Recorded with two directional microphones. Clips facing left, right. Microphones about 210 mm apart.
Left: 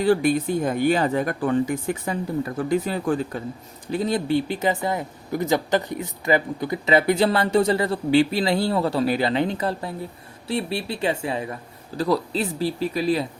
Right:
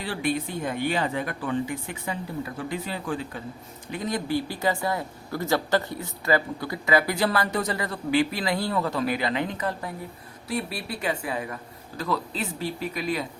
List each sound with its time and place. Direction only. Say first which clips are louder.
0.0 s speech: left 9 dB; 45° left (ahead or behind)
3.9 s speech: left 5 dB; 30° left (ahead or behind)